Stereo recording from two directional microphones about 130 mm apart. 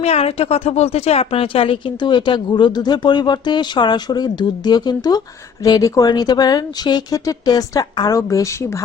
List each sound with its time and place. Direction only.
0.0 s a woman's voice: 50° left (ahead or behind); by 8.8 s 25° left (ahead or behind)